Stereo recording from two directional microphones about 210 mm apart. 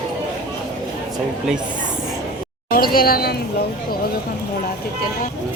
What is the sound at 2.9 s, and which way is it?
Speech, 45° left (ahead or behind).